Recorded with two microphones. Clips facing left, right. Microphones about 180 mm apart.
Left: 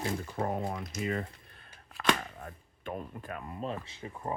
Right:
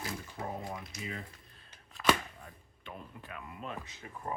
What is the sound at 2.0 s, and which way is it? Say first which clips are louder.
Rub: even; 60° left (ahead or behind).